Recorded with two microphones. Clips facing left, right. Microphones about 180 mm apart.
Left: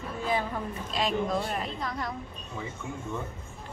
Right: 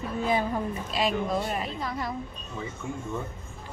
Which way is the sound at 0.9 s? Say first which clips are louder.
Right 1 dB; 5° right (ahead or behind).